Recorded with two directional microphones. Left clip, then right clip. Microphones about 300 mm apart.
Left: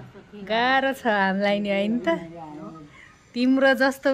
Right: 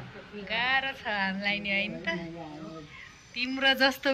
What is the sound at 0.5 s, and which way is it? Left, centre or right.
Speech, left.